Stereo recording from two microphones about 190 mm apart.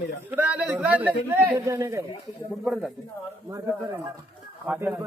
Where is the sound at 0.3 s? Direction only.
10° right (ahead or behind).